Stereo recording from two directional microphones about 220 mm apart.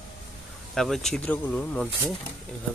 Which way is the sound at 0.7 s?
Centre (ahead or behind).